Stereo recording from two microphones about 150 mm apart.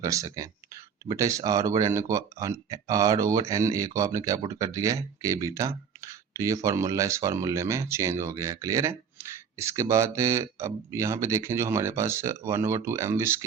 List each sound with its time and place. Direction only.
0.0 s speech: 20° right (ahead or behind)